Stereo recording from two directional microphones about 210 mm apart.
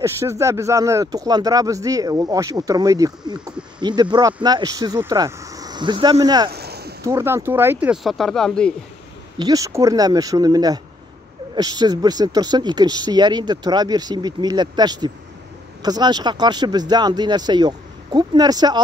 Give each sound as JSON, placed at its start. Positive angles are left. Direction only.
{"t": 0.0, "sound": "speech", "side_deg": -15}
{"t": 6.5, "sound": "a sound", "side_deg": -50}
{"t": 7.1, "sound": "speech", "side_deg": -10}
{"t": 9.4, "sound": "speech", "side_deg": -15}